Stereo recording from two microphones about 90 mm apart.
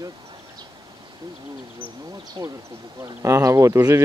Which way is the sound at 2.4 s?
55° right (ahead or behind).